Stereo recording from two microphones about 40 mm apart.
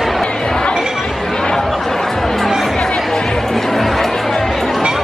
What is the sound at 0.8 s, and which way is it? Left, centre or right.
Speech, centre.